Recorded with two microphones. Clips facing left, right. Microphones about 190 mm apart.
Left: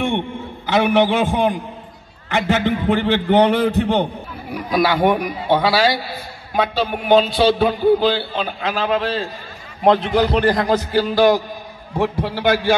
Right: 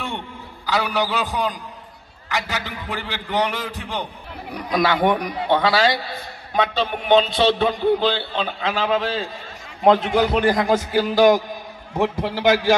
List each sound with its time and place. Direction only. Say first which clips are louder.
0.7 s a man's voice: left 7 dB; 20° left (ahead or behind)
4.5 s a man's voice: left 2 dB; 5° left (ahead or behind)
11.1 s a man's voice: right 1 dB; 20° right (ahead or behind)